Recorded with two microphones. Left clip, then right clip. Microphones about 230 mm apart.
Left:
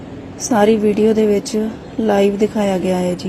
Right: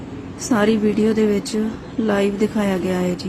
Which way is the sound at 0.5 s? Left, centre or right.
Centre.